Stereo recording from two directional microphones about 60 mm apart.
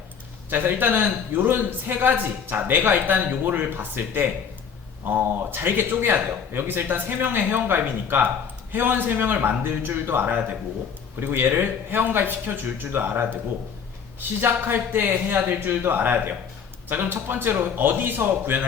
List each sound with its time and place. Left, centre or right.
0.5 s a man's voice: right